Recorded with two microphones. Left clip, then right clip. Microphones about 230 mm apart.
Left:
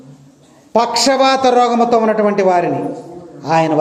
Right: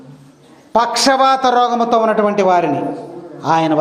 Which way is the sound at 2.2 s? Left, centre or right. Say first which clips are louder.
Even; centre.